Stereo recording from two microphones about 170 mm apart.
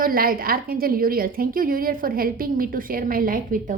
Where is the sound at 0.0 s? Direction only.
55° right (ahead or behind).